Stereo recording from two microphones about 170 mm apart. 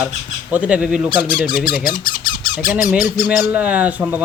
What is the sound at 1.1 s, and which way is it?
Speech, 25° left (ahead or behind).